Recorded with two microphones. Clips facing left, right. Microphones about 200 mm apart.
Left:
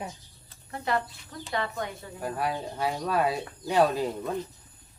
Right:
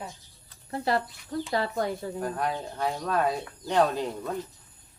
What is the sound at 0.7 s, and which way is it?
A woman's voice, 35° right (ahead or behind).